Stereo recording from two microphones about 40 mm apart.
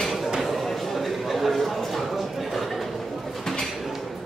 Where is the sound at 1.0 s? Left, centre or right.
Centre.